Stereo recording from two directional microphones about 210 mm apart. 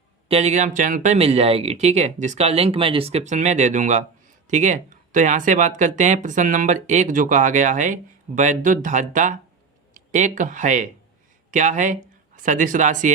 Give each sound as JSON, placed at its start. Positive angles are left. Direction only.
{"t": 0.3, "sound": "speech", "side_deg": -30}